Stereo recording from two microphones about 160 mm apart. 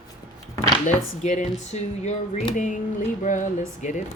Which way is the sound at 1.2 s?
50° left (ahead or behind).